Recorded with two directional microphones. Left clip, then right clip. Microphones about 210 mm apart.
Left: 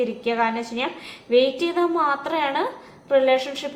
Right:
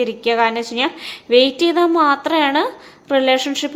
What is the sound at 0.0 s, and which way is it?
A woman's voice, 45° right (ahead or behind).